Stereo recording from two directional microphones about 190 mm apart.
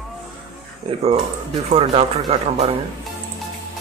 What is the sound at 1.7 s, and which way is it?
Speech, 30° right (ahead or behind).